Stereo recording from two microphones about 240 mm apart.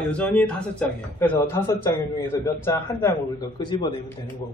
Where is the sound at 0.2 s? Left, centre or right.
Centre.